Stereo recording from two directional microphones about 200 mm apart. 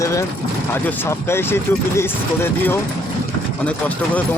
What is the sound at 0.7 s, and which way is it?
Speech, 10° left (ahead or behind).